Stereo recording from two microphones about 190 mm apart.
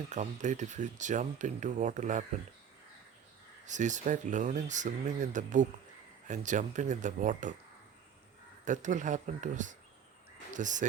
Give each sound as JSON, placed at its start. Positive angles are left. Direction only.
{"t": 0.1, "sound": "speech", "side_deg": -40}
{"t": 3.7, "sound": "speech", "side_deg": -40}
{"t": 8.6, "sound": "speech", "side_deg": -40}